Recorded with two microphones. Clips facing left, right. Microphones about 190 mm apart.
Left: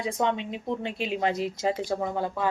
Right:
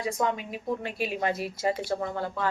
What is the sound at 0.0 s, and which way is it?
Speech, 25° left (ahead or behind).